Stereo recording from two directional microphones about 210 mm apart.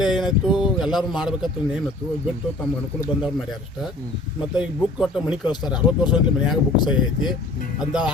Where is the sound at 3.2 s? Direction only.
Centre (ahead or behind).